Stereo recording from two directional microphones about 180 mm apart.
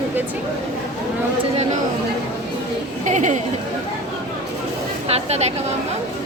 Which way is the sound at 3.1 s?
40° right (ahead or behind).